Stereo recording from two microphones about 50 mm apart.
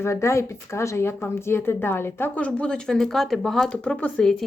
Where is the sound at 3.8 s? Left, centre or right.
Left.